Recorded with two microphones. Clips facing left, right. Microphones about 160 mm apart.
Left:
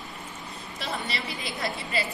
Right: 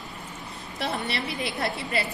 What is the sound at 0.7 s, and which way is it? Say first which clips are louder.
A woman's voice: right 4 dB; 65° right (ahead or behind).